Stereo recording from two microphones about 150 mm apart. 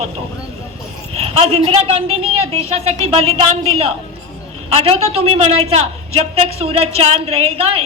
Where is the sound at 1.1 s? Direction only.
40° right (ahead or behind).